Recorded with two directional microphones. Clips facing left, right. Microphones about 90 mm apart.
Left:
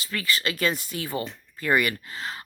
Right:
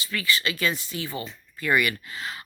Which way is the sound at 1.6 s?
40° left (ahead or behind).